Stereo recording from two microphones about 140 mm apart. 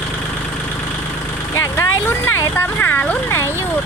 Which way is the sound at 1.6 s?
15° left (ahead or behind).